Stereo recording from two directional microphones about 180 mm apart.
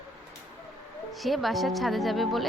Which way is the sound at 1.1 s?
Centre (ahead or behind).